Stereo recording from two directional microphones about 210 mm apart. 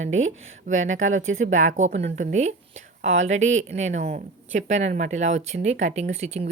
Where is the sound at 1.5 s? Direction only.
35° right (ahead or behind).